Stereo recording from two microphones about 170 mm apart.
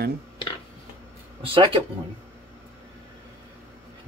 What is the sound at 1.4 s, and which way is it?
Speech, 30° right (ahead or behind).